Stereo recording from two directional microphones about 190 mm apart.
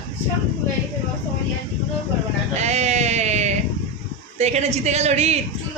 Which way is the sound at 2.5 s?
35° right (ahead or behind).